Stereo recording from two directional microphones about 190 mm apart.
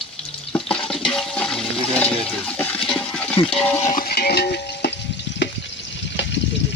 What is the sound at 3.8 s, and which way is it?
Stir, 45° left (ahead or behind).